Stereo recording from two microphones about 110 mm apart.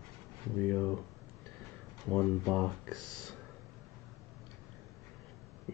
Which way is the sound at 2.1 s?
10° left (ahead or behind).